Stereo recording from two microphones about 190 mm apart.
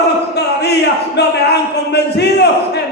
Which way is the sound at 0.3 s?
60° left (ahead or behind).